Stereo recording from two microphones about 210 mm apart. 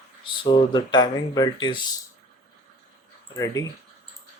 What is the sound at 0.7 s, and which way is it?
Speech, 20° left (ahead or behind).